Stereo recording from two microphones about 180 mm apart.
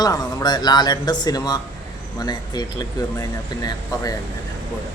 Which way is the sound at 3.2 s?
20° left (ahead or behind).